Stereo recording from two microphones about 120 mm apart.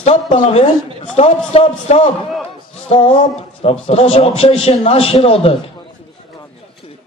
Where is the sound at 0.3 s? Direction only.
60° left (ahead or behind).